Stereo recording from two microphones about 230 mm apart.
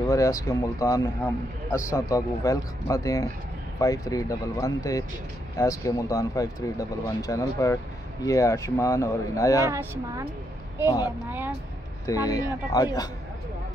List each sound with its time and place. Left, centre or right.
0.0 s speech: centre
9.7 s speech: centre
11.2 s speech: centre
12.1 s speech: centre